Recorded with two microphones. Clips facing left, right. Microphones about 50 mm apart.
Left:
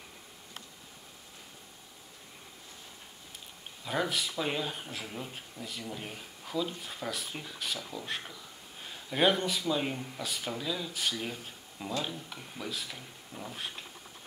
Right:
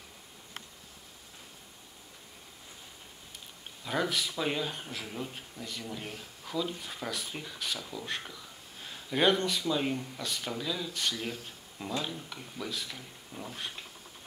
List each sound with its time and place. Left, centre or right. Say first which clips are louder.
3.8 s speech: right 1 dB; centre